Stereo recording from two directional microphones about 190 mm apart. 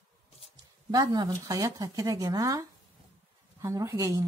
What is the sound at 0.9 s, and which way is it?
A woman's voice, 20° right (ahead or behind).